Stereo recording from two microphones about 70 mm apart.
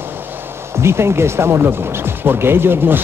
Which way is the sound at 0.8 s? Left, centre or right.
Right.